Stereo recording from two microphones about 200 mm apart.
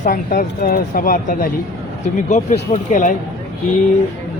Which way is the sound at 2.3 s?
35° left (ahead or behind).